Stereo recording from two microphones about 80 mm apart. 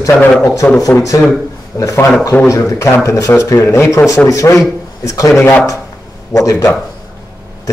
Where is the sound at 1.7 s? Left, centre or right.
Left.